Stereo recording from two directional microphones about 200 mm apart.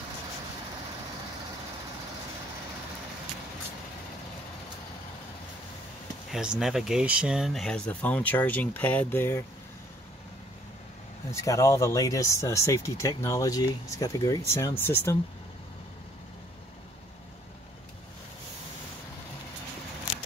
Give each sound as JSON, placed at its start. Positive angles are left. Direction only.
{"t": 6.3, "sound": "speech", "side_deg": -5}
{"t": 11.4, "sound": "speech", "side_deg": 15}